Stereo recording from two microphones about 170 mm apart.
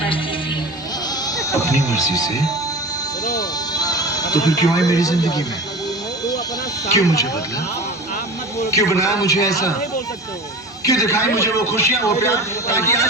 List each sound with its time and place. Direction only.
1.3 s bleat: 20° left (ahead or behind)
2.0 s a man's voice: 20° left (ahead or behind)
3.2 s music: 20° left (ahead or behind)
6.9 s a man's voice: 20° left (ahead or behind)
8.5 s a man's voice: 20° left (ahead or behind)
10.8 s a man's voice: 20° left (ahead or behind)